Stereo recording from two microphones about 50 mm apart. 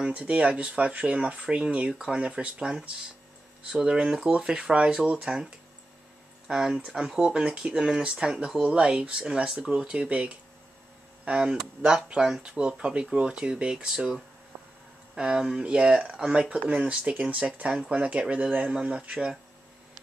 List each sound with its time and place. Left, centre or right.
0.0 s speech: centre
3.7 s speech: centre
7.2 s speech: centre